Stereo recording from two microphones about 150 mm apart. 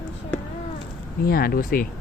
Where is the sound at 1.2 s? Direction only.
75° left (ahead or behind).